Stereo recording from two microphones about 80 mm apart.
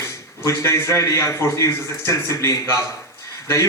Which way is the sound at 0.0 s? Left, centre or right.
Left.